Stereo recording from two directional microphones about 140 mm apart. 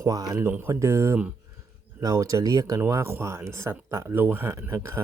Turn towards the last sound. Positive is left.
turn(degrees=-20)  # may be behind; listen again after turning